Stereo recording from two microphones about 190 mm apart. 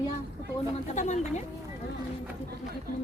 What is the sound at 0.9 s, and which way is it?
Speech, 40° left (ahead or behind).